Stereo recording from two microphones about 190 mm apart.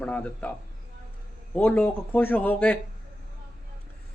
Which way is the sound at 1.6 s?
10° left (ahead or behind).